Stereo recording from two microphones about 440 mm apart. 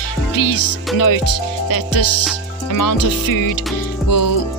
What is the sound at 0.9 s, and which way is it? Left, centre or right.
Music, left.